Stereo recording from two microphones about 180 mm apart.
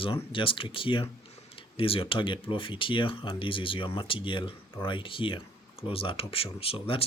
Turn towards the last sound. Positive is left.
turn(degrees=30)  # may be behind; listen again after turning